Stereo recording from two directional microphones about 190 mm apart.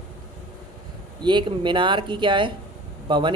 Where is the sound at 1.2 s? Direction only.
25° right (ahead or behind).